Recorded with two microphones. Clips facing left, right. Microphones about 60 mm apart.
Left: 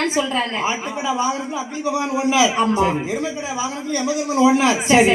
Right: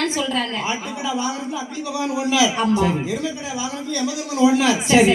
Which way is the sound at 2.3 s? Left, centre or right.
Left.